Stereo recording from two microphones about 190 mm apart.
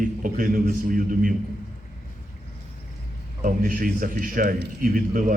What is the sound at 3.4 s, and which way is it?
A man's voice, 45° right (ahead or behind).